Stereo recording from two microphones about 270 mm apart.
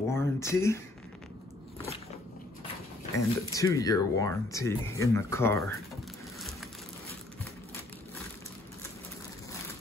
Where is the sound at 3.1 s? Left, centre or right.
Centre.